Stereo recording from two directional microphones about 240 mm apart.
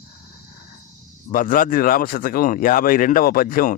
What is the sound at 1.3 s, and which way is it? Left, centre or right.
Speech, left.